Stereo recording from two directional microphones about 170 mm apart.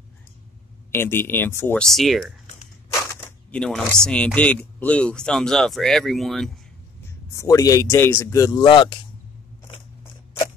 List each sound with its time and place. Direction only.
0.9 s speech: 15° left (ahead or behind)
3.5 s speech: 5° left (ahead or behind)
7.3 s speech: 20° left (ahead or behind)